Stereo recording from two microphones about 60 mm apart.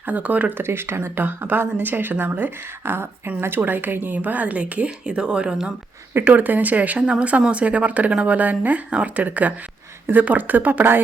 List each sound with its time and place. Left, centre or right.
0.0 s speech: right
0.5 s speech: right; by 5.7 s centre
6.1 s speech: right